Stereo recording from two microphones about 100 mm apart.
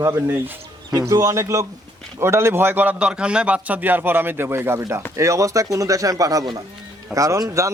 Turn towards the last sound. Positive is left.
turn(degrees=-35)  # may be behind; listen again after turning